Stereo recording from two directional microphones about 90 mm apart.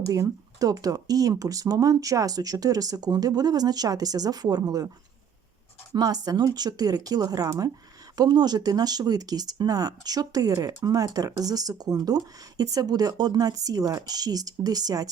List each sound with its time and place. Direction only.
0.1 s speech: 40° right (ahead or behind)
5.9 s speech: 50° right (ahead or behind)